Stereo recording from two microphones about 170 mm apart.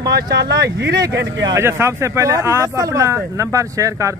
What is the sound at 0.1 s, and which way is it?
Speech, 65° right (ahead or behind).